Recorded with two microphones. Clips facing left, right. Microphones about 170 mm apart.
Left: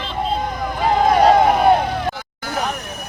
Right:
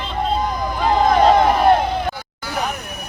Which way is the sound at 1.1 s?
10° left (ahead or behind).